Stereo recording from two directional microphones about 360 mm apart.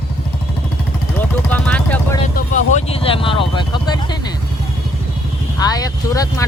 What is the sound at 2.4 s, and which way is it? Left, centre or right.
Vehicle, centre.